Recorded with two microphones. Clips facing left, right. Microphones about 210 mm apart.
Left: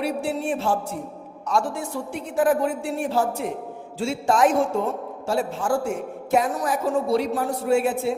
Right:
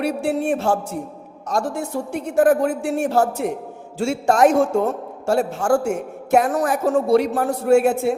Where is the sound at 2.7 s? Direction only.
75° right (ahead or behind).